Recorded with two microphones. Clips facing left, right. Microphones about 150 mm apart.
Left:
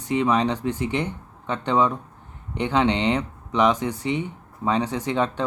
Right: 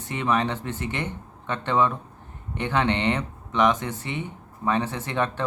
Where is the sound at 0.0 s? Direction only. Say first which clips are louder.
Left 4 dB; 15° left (ahead or behind).